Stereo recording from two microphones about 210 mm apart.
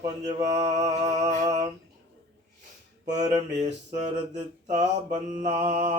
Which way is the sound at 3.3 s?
35° right (ahead or behind).